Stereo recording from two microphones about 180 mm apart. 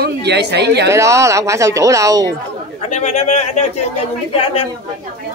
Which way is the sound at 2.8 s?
40° left (ahead or behind).